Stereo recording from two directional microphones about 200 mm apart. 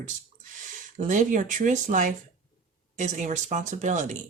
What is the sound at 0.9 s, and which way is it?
Speech, 40° right (ahead or behind).